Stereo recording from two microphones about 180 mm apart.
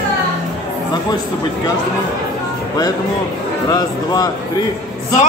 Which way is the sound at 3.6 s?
20° left (ahead or behind).